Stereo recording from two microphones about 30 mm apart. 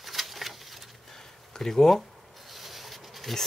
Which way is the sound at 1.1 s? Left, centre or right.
Centre.